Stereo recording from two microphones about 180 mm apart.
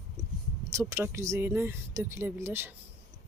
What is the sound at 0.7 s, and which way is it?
Speech, 15° right (ahead or behind).